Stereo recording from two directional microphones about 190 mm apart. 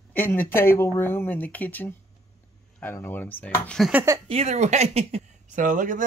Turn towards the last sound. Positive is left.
turn(degrees=-40)  # may be behind; listen again after turning